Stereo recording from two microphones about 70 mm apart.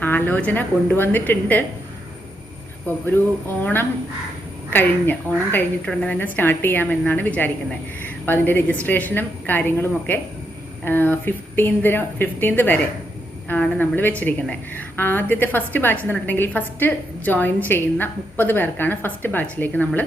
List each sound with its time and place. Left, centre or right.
0.0 s a woman's voice: left
3.6 s a woman's voice: left
5.9 s a woman's voice: centre
6.1 s a woman's voice: left
7.0 s a woman's voice: left